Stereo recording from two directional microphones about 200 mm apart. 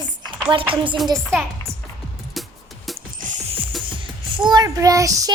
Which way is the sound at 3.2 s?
40° right (ahead or behind).